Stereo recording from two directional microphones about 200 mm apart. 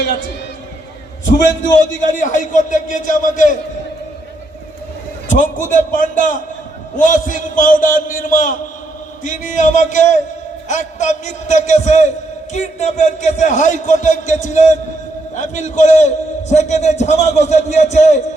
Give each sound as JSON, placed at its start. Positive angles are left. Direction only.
{"t": 2.1, "sound": "a man's voice", "side_deg": 40}
{"t": 5.3, "sound": "a man's voice", "side_deg": 40}